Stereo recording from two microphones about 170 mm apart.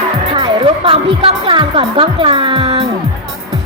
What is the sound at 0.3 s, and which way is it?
Speech, 30° right (ahead or behind).